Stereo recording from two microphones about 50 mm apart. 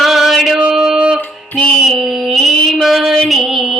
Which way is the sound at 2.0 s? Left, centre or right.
Centre.